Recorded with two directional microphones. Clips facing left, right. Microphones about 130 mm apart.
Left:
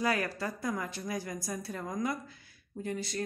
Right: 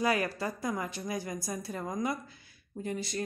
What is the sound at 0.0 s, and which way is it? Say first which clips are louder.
A woman's voice: right 2 dB; 15° right (ahead or behind).